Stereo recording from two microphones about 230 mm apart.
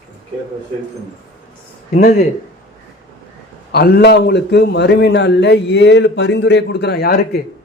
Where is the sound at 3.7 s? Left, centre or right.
Left.